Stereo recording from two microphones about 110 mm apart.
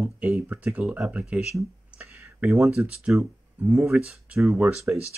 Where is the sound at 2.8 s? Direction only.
10° right (ahead or behind).